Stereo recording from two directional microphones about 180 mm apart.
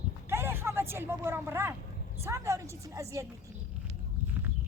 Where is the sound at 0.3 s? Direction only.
15° right (ahead or behind).